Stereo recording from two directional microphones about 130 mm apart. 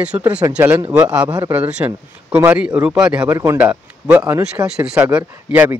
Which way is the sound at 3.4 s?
20° right (ahead or behind).